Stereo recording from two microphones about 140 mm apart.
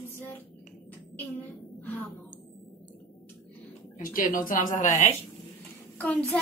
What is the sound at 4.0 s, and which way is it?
A woman's voice, 75° left (ahead or behind).